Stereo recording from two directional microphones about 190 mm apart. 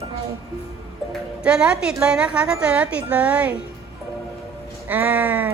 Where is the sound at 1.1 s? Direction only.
5° right (ahead or behind).